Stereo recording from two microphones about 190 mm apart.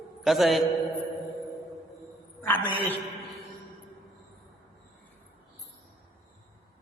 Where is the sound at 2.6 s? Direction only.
25° left (ahead or behind).